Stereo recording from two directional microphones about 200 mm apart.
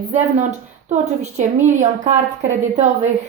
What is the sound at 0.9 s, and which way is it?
A woman's voice, 35° right (ahead or behind).